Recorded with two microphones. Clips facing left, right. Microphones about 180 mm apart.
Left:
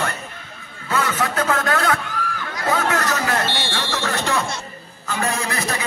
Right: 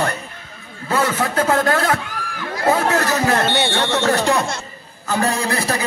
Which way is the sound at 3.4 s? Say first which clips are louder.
Right 6 dB; 65° right (ahead or behind).